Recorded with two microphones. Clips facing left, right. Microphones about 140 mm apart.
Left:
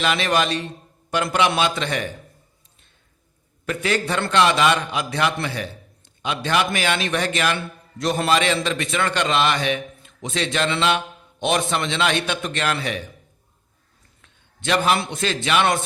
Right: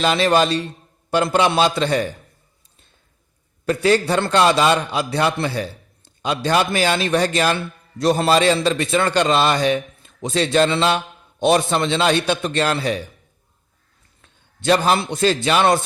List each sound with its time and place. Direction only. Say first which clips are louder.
0.0 s a man's voice: right 4 dB; 35° right (ahead or behind)
3.7 s a man's voice: right 6 dB; 35° right (ahead or behind)
14.2 s a man's voice: right 4 dB; 35° right (ahead or behind)